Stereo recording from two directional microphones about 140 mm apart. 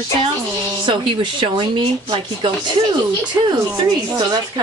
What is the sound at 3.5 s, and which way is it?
Speech, 30° right (ahead or behind).